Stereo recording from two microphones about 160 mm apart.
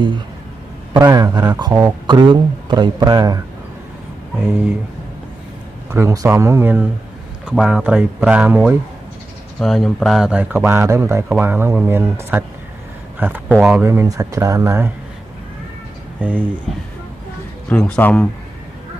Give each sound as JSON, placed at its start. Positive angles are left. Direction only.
{"t": 0.9, "sound": "speech", "side_deg": -25}
{"t": 1.7, "sound": "speech", "side_deg": -10}
{"t": 2.0, "sound": "speech", "side_deg": -30}
{"t": 5.9, "sound": "speech", "side_deg": -15}
{"t": 9.6, "sound": "speech", "side_deg": 0}
{"t": 13.8, "sound": "speech", "side_deg": -20}
{"t": 16.2, "sound": "speech", "side_deg": -10}
{"t": 17.6, "sound": "speech", "side_deg": 10}